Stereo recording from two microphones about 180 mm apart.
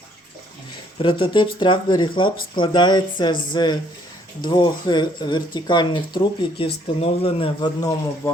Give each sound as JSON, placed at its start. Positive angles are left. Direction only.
{"t": 0.9, "sound": "speech", "side_deg": 30}